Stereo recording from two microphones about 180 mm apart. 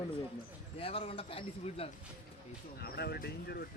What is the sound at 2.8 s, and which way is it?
Speech, 60° left (ahead or behind).